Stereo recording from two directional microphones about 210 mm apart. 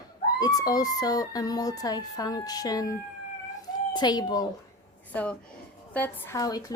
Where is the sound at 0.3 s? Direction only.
20° left (ahead or behind).